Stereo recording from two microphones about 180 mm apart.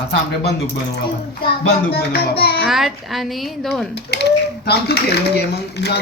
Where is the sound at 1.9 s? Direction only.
60° left (ahead or behind).